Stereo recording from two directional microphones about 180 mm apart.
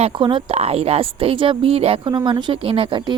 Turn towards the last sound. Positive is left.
turn(degrees=-25)  # may be behind; listen again after turning